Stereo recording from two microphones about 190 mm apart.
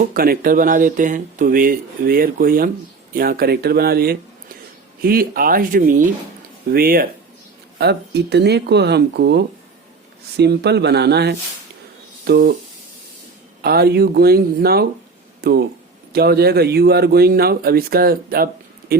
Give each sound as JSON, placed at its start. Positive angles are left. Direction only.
{"t": 0.1, "sound": "speech", "side_deg": -50}
{"t": 7.8, "sound": "a man's voice", "side_deg": -60}
{"t": 13.6, "sound": "a man's voice", "side_deg": -55}